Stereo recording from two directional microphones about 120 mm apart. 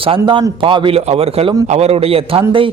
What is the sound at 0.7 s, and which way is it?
A man's voice, 45° right (ahead or behind).